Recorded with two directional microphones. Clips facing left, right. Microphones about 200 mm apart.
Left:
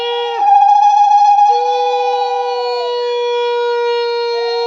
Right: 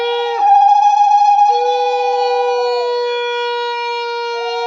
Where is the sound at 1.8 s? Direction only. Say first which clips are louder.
Even; 20° right (ahead or behind).